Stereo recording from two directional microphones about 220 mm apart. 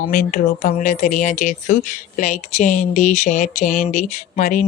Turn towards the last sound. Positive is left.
turn(degrees=35)  # may be behind; listen again after turning